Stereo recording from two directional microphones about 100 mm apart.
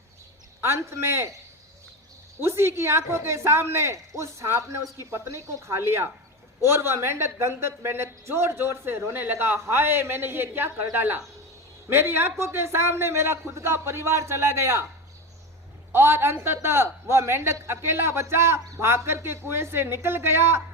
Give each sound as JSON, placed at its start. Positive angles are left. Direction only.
{"t": 0.6, "sound": "a man's voice", "side_deg": -25}
{"t": 2.4, "sound": "a man's voice", "side_deg": -25}
{"t": 15.9, "sound": "a man's voice", "side_deg": -25}